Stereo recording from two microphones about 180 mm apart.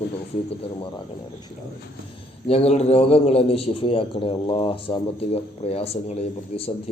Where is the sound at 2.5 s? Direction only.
35° left (ahead or behind).